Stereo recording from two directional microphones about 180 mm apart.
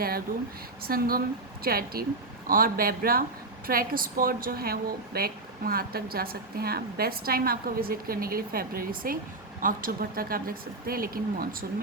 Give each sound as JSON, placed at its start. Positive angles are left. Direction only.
{"t": 0.8, "sound": "a woman's voice", "side_deg": -55}